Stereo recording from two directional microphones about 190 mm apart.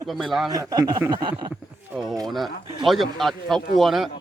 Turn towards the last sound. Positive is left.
turn(degrees=0)  # may be behind; listen again after turning